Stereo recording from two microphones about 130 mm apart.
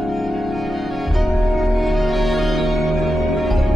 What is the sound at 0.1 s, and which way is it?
Music, centre (ahead or behind).